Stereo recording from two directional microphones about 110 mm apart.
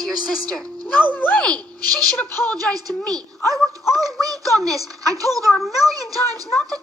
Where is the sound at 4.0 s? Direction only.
30° right (ahead or behind).